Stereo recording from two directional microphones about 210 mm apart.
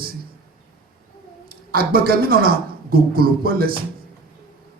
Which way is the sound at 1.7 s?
45° right (ahead or behind).